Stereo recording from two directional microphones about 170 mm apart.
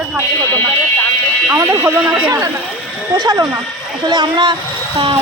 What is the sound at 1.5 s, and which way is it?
Speech, 15° right (ahead or behind).